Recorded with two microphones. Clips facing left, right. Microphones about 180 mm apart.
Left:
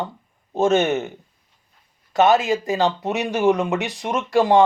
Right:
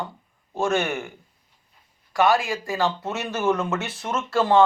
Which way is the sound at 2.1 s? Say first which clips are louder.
Left 4 dB; 20° left (ahead or behind).